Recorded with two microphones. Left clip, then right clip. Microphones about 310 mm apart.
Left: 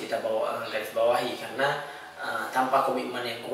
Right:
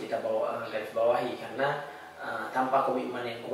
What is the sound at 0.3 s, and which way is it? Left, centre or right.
Speech, centre.